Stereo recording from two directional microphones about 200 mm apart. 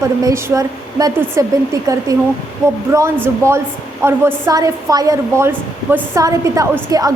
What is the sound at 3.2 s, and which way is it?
A woman's voice, 15° right (ahead or behind).